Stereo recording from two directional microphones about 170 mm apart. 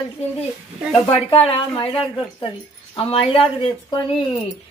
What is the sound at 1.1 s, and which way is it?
Speech, 35° left (ahead or behind).